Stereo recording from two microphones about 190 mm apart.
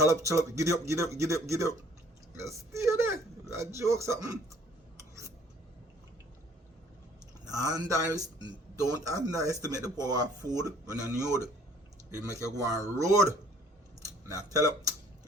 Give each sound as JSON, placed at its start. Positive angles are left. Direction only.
{"t": 0.0, "sound": "speech", "side_deg": -15}
{"t": 2.3, "sound": "a sound", "side_deg": -15}
{"t": 7.4, "sound": "a man's voice", "side_deg": -20}
{"t": 12.3, "sound": "a man's voice", "side_deg": 15}
{"t": 12.5, "sound": "speech", "side_deg": -20}